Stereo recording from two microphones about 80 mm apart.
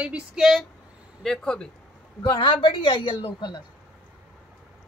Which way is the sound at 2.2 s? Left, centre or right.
Left.